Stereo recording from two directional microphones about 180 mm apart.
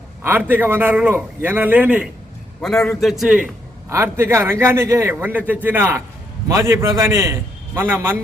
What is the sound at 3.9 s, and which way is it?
A man's voice, 15° right (ahead or behind).